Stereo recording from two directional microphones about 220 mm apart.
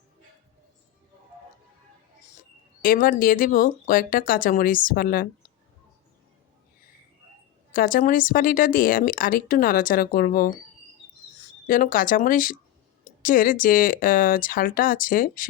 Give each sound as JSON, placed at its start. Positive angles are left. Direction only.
{"t": 2.8, "sound": "speech", "side_deg": 40}
{"t": 7.7, "sound": "speech", "side_deg": 40}
{"t": 11.7, "sound": "speech", "side_deg": 40}